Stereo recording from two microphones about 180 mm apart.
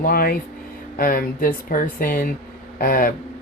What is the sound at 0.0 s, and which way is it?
Speech, 55° left (ahead or behind).